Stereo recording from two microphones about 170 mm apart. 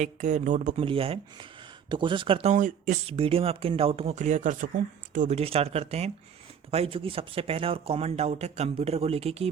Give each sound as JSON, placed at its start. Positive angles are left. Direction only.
{"t": 0.0, "sound": "speech", "side_deg": -45}
{"t": 0.9, "sound": "speech", "side_deg": -35}
{"t": 3.1, "sound": "speech", "side_deg": -35}
{"t": 5.4, "sound": "speech", "side_deg": -35}